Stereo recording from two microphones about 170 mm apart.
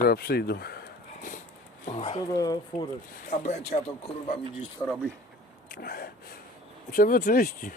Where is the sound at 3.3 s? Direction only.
45° left (ahead or behind).